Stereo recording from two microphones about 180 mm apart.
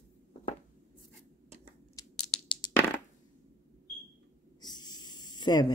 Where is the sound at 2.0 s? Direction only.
20° left (ahead or behind).